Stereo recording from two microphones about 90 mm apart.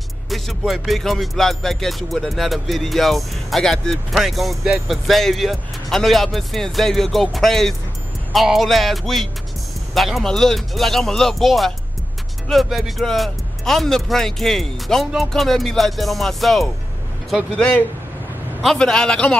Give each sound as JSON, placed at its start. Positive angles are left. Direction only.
{"t": 0.3, "sound": "speech", "side_deg": 0}
{"t": 17.6, "sound": "a man's voice", "side_deg": 15}
{"t": 18.6, "sound": "a man's voice", "side_deg": 5}